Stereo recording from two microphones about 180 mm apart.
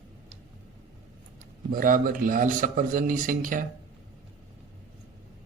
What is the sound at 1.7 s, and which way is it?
A man's voice, 50° right (ahead or behind).